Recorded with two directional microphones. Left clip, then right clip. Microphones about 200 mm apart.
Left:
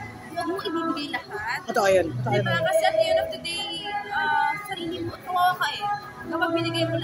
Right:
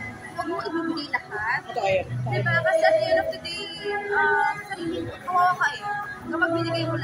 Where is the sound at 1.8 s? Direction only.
45° left (ahead or behind).